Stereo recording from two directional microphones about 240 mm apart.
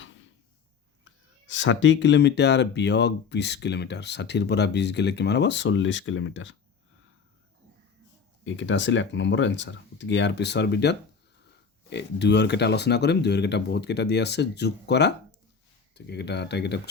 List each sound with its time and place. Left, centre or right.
0.0 s a sound: left
1.5 s speech: left
8.4 s speech: left